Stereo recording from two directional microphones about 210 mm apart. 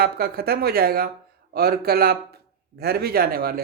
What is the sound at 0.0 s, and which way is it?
A man's voice, 45° right (ahead or behind).